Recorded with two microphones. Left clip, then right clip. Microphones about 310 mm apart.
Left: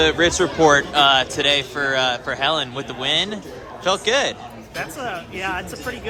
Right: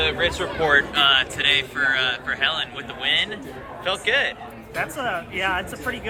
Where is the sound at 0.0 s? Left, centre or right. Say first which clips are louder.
Left 5 dB; left.